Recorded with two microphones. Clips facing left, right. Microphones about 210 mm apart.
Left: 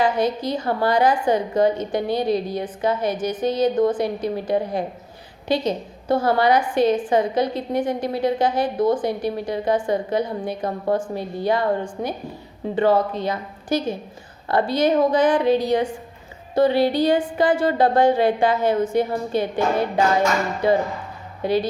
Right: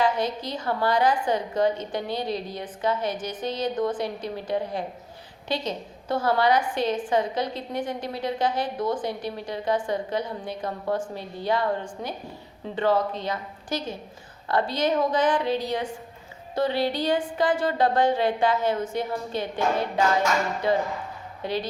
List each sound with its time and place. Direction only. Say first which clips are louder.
0.0 s a woman's voice: left 4 dB; 10° left (ahead or behind)
12.0 s a woman's voice: left 7 dB; 55° left (ahead or behind)
12.7 s a woman's voice: left 5 dB; 10° left (ahead or behind)